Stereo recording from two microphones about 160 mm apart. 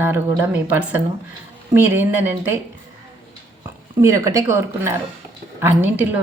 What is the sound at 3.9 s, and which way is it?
A woman's voice, 20° right (ahead or behind).